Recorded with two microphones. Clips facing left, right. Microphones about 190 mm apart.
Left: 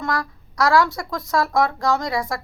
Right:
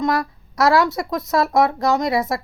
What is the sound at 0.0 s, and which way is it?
Speech, 25° right (ahead or behind).